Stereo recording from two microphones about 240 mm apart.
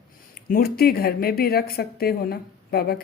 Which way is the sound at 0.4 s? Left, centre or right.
Left.